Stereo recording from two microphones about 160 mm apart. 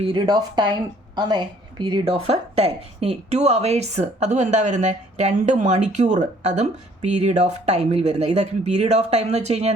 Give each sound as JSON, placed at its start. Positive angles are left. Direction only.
{"t": 0.0, "sound": "a woman's voice", "side_deg": -30}